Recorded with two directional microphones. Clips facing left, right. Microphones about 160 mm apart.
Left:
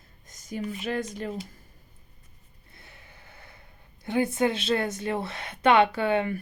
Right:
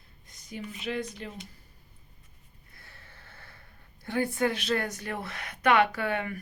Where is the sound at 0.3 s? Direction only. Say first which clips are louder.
Left 7 dB; 45° left (ahead or behind).